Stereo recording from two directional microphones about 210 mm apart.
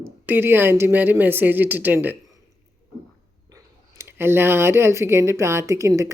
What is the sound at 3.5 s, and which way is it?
Speech, 10° right (ahead or behind).